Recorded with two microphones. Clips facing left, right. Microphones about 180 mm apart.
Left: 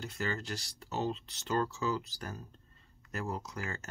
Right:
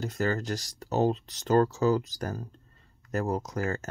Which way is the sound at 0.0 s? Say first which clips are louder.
Right 8 dB; 40° right (ahead or behind).